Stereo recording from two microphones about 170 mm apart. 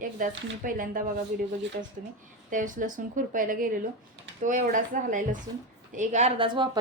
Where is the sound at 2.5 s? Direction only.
50° right (ahead or behind).